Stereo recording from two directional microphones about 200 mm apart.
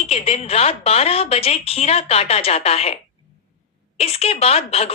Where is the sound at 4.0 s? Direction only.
30° left (ahead or behind).